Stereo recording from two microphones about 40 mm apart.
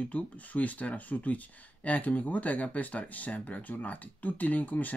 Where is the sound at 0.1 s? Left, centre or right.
Left.